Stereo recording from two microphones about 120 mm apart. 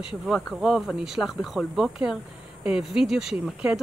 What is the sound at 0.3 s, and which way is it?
A woman's voice, centre (ahead or behind).